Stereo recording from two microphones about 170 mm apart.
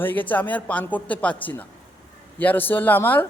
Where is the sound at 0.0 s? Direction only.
10° left (ahead or behind).